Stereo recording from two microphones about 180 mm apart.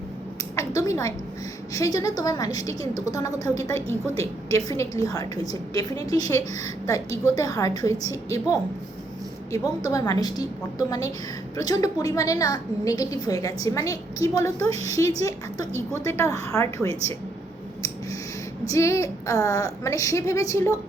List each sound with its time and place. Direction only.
0.5 s a sound: 15° left (ahead or behind)
1.7 s a woman's voice: 20° left (ahead or behind)
18.6 s a woman's voice: 15° left (ahead or behind)